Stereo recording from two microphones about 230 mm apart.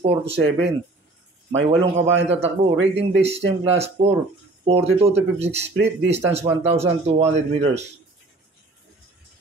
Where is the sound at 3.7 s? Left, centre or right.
Right.